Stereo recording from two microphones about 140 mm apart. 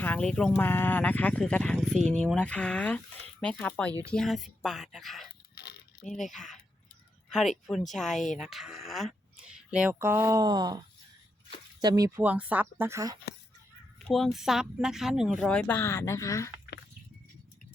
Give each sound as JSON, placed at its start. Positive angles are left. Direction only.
{"t": 0.0, "sound": "speech", "side_deg": 10}
{"t": 10.0, "sound": "speech", "side_deg": -20}
{"t": 12.2, "sound": "speech", "side_deg": -10}
{"t": 14.1, "sound": "speech", "side_deg": 0}